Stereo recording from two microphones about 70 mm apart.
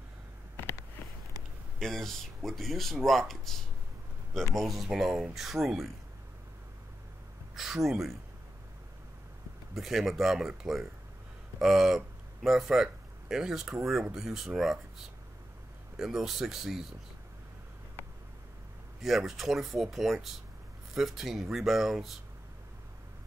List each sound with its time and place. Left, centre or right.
1.8 s speech: centre
4.6 s speech: centre
7.5 s speech: centre
9.8 s speech: centre
18.9 s speech: centre